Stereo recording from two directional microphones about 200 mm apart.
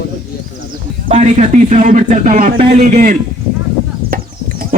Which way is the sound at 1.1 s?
35° right (ahead or behind).